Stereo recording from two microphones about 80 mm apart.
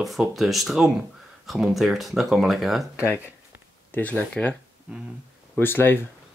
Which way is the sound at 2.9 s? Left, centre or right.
Left.